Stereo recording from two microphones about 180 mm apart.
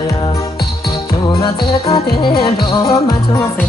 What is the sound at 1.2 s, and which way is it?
Music, 25° left (ahead or behind).